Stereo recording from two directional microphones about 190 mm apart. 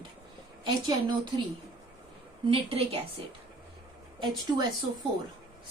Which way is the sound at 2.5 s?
30° right (ahead or behind).